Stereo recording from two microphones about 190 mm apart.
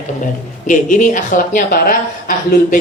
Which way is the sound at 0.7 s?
45° left (ahead or behind).